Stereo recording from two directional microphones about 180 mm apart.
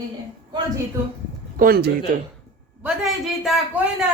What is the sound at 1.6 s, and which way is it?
Speech, 55° right (ahead or behind).